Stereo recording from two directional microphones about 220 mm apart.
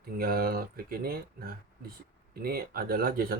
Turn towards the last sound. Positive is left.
turn(degrees=-40)  # may be behind; listen again after turning